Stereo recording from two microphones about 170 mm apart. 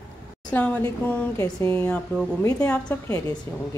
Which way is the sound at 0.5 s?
10° left (ahead or behind).